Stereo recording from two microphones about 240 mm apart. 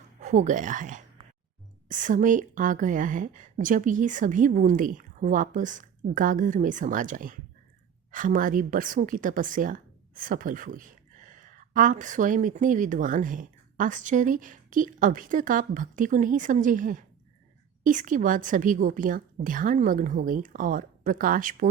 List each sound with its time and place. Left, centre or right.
0.2 s a woman's voice: right